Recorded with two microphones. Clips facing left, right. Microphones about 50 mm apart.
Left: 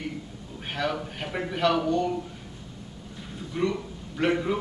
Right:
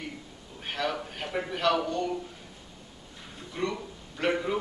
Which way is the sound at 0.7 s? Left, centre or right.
Centre.